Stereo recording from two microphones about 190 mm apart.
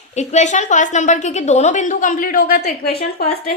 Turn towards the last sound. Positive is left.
turn(degrees=55)  # may be behind; listen again after turning